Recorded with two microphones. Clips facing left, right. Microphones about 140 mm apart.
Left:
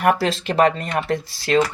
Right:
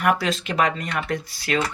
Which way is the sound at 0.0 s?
35° left (ahead or behind).